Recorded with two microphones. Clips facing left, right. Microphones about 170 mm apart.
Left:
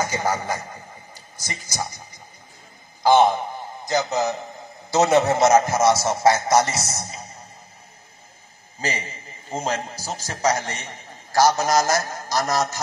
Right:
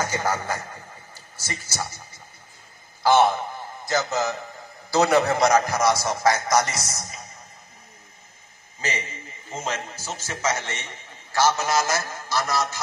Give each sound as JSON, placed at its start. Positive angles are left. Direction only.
{"t": 0.0, "sound": "a man's voice", "side_deg": 10}
{"t": 8.8, "sound": "a man's voice", "side_deg": 35}